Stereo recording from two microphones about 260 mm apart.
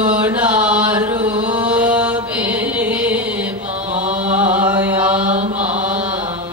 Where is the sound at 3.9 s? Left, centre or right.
Right.